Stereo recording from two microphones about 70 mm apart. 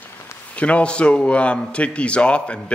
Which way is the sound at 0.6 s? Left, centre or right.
Centre.